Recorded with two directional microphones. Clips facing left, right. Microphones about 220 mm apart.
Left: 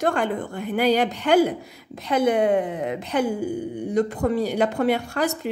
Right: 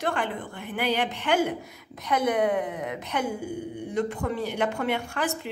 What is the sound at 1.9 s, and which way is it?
A woman's voice, 30° left (ahead or behind).